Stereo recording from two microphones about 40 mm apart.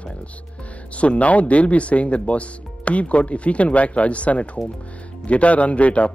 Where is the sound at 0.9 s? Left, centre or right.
Left.